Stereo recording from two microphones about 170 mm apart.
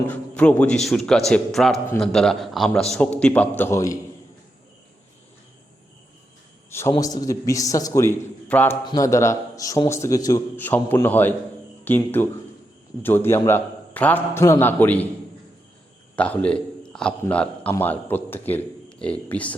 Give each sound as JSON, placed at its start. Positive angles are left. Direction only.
{"t": 0.1, "sound": "a man's voice", "side_deg": 10}
{"t": 6.7, "sound": "a man's voice", "side_deg": 15}
{"t": 8.8, "sound": "a man's voice", "side_deg": 25}
{"t": 16.1, "sound": "a man's voice", "side_deg": 10}